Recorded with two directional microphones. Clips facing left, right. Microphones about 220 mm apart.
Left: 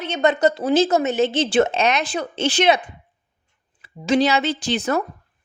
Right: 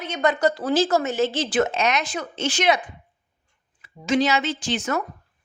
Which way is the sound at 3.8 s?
35° left (ahead or behind).